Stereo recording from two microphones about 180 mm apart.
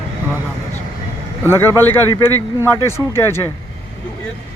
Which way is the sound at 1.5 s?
15° left (ahead or behind).